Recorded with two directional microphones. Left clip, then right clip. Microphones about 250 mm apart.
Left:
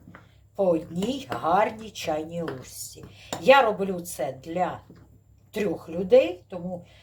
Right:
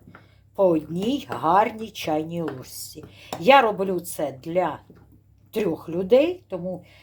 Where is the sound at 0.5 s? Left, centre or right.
Right.